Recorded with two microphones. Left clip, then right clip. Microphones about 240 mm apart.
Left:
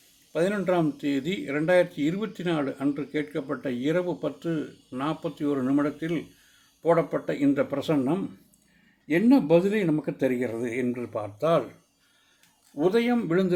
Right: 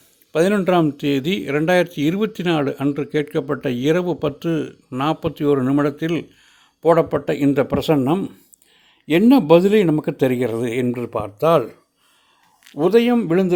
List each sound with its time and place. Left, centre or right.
0.3 s a man's voice: right
12.7 s speech: right